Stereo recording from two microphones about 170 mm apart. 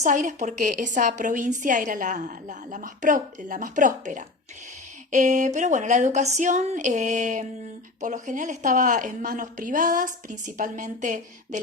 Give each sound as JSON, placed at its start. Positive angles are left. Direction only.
{"t": 0.0, "sound": "a woman's voice", "side_deg": -45}